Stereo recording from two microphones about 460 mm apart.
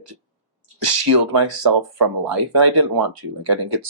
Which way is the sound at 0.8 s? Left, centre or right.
Right.